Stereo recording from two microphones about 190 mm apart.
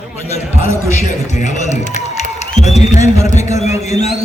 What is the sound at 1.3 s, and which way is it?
A man's voice, 40° left (ahead or behind).